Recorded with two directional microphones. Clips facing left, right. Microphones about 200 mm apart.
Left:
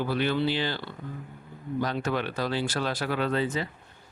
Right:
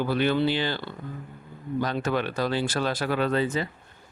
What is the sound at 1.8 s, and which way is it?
Speech, 50° right (ahead or behind).